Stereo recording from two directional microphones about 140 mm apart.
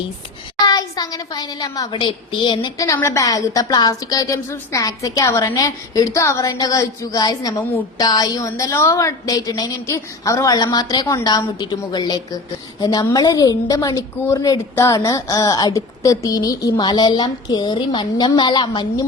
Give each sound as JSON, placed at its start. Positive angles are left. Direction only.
{"t": 0.6, "sound": "a woman's voice", "side_deg": 30}
{"t": 2.8, "sound": "a woman's voice", "side_deg": 20}